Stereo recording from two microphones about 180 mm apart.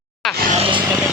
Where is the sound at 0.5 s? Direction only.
30° right (ahead or behind).